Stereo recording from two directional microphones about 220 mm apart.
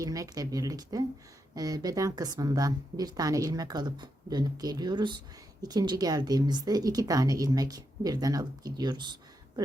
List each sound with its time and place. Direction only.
0.0 s a woman's voice: 15° right (ahead or behind)